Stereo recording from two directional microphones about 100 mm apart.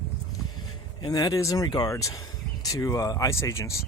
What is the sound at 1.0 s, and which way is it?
Speech, 40° left (ahead or behind).